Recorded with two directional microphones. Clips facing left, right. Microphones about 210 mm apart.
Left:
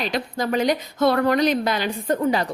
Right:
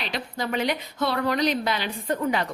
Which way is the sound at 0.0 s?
45° left (ahead or behind).